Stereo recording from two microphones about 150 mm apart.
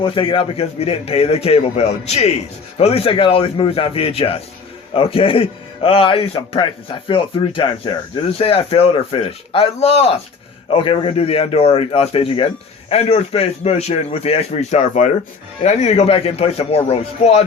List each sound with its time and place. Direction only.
0.0 s a man's voice: 35° left (ahead or behind)